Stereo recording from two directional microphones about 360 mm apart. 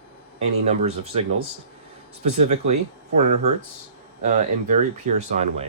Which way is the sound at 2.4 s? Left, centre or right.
Centre.